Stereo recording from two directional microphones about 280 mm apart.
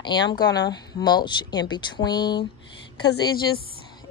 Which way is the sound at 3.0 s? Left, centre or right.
Left.